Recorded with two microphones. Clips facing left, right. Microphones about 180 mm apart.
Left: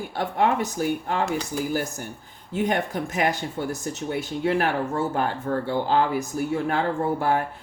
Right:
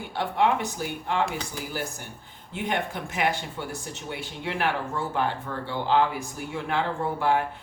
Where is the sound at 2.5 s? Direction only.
40° left (ahead or behind).